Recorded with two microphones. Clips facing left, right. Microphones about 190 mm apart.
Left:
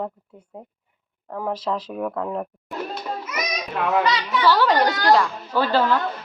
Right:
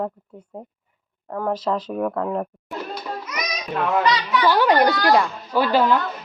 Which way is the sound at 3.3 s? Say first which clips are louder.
Even; 5° left (ahead or behind).